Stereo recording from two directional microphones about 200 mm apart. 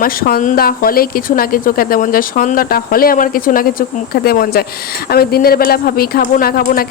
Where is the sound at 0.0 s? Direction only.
45° left (ahead or behind).